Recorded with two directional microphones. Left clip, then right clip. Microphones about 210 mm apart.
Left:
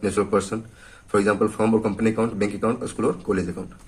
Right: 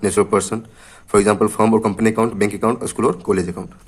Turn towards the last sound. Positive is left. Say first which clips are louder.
# right 6 dB
turn(degrees=-40)  # may be behind; listen again after turning